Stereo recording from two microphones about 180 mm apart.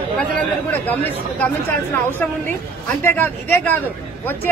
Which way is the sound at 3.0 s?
10° left (ahead or behind).